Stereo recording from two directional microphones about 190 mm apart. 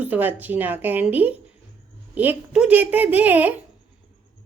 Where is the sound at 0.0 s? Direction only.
10° right (ahead or behind).